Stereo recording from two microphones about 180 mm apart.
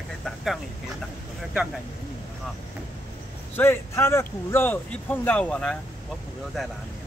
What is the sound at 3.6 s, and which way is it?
Speech, 15° left (ahead or behind).